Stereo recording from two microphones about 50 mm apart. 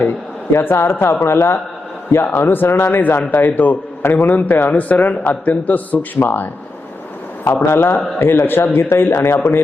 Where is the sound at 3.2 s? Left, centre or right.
Left.